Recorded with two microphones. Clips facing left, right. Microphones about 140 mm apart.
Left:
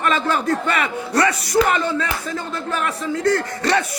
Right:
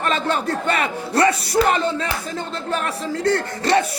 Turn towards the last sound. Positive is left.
turn(degrees=-30)  # may be behind; listen again after turning